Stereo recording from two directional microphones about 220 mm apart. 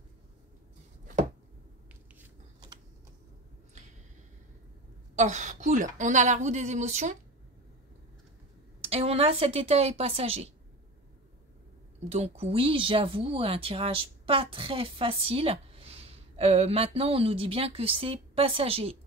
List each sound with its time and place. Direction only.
5.1 s a woman's voice: 35° right (ahead or behind)
8.8 s speech: 25° right (ahead or behind)
12.1 s speech: 30° right (ahead or behind)